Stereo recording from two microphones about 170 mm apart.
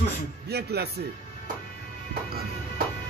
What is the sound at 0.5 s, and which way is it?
Speech, 70° right (ahead or behind).